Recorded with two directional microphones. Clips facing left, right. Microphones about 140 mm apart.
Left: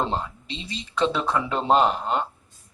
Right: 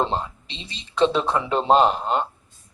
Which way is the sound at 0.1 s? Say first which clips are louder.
Right 1 dB; 25° right (ahead or behind).